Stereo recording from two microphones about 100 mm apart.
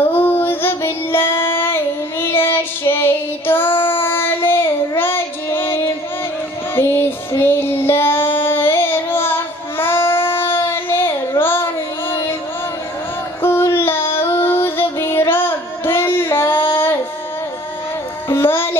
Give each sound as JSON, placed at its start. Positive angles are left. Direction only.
{"t": 0.0, "sound": "child singing", "side_deg": 20}
{"t": 13.4, "sound": "music", "side_deg": 25}
{"t": 14.2, "sound": "female singing", "side_deg": 25}
{"t": 18.3, "sound": "child singing", "side_deg": 25}